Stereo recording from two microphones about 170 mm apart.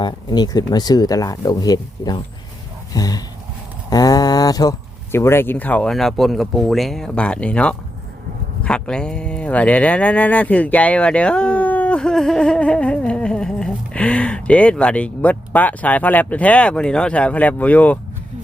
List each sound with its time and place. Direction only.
0.0 s speech: 25° left (ahead or behind)
3.8 s a sound: 20° left (ahead or behind)
5.1 s speech: 15° left (ahead or behind)